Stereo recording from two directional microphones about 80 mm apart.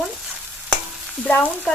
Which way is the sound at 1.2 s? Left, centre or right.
Centre.